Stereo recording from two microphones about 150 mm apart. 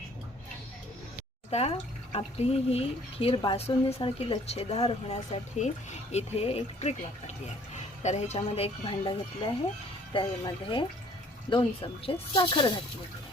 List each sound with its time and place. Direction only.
1.5 s speech: 45° left (ahead or behind)
8.0 s speech: 45° left (ahead or behind)